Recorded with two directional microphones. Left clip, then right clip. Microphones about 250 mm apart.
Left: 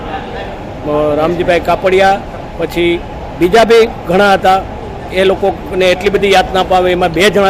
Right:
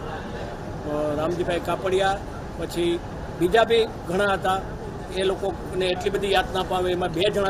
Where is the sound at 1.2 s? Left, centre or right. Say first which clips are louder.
Left 14 dB; right.